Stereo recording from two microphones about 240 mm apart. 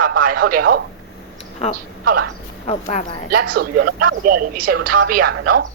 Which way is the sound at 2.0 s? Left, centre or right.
Right.